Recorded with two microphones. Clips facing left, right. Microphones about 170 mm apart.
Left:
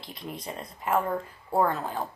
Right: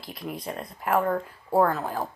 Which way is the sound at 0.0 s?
Centre (ahead or behind).